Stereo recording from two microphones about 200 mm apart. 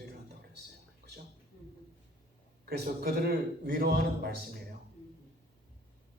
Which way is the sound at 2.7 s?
50° right (ahead or behind).